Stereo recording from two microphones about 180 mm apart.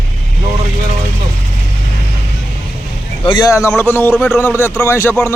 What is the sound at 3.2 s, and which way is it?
A man's voice, 20° left (ahead or behind).